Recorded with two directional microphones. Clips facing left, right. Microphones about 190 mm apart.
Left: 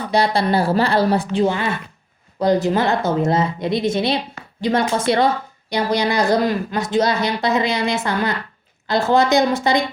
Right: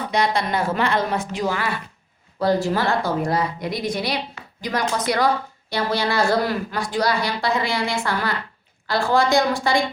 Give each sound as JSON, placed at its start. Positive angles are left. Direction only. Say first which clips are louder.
{"t": 0.1, "sound": "a woman's voice", "louder": "left 5 dB", "side_deg": 35}